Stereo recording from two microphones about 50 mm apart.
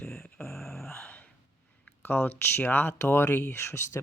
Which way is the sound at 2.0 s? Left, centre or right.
Left.